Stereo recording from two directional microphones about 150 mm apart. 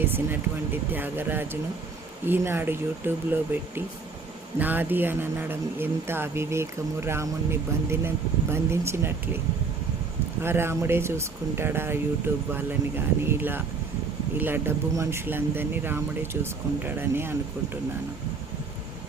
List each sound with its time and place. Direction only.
0.0 s speech: 15° right (ahead or behind)
10.4 s speech: 15° right (ahead or behind)